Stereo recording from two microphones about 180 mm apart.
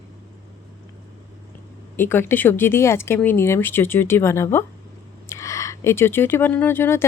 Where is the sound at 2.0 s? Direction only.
15° left (ahead or behind).